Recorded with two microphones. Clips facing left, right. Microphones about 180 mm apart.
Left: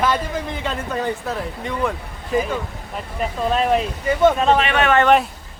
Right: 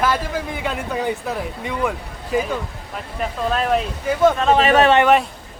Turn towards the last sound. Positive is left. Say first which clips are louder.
# right 5 dB
turn(degrees=-40)  # may be behind; listen again after turning